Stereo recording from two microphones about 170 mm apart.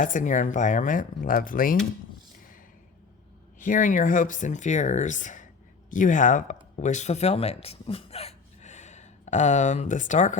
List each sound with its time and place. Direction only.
0.0 s speech: 50° left (ahead or behind)
3.6 s speech: 50° left (ahead or behind)